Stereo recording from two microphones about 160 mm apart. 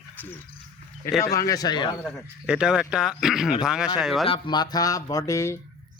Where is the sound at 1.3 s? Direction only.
20° left (ahead or behind).